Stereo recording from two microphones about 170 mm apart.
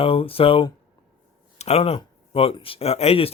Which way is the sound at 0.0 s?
35° left (ahead or behind).